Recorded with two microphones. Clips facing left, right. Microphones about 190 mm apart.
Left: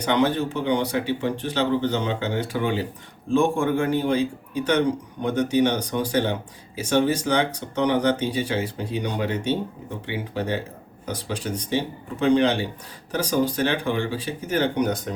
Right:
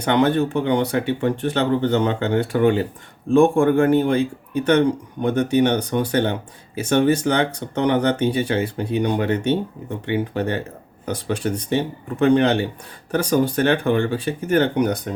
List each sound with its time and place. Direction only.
0.0 s speech: 55° right (ahead or behind)